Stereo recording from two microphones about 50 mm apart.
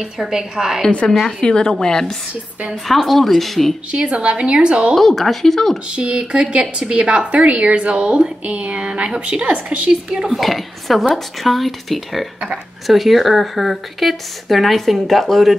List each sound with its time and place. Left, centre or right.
0.0 s a woman's voice: centre
1.4 s a woman's voice: centre
2.7 s speech: centre
3.9 s speech: right
4.9 s speech: centre
5.9 s speech: right
10.3 s speech: centre